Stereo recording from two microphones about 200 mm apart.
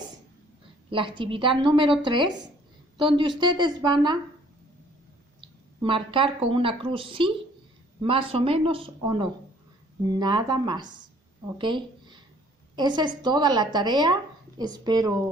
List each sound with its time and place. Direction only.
0.9 s a woman's voice: 25° right (ahead or behind)
5.4 s a woman's voice: 25° right (ahead or behind)